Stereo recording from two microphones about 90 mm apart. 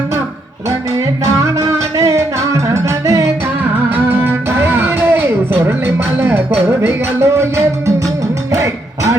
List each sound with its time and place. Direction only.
0.9 s music: 35° right (ahead or behind)